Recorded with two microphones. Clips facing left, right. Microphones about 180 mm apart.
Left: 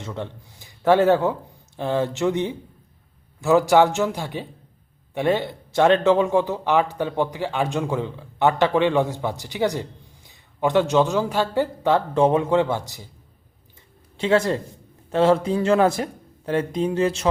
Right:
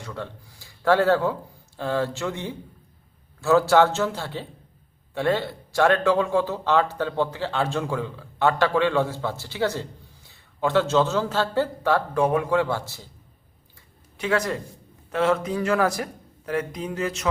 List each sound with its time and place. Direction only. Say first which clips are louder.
0.0 s speech: left 3 dB; 20° left (ahead or behind)
14.2 s speech: left 5 dB; 25° left (ahead or behind)